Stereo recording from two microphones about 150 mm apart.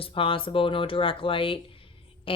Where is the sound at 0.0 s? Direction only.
35° left (ahead or behind).